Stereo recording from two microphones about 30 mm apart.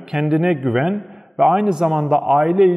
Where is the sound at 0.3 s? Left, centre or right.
Right.